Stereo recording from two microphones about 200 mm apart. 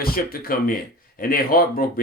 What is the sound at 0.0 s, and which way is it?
Speech, 45° left (ahead or behind).